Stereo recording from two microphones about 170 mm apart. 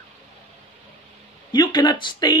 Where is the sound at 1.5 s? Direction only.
25° left (ahead or behind).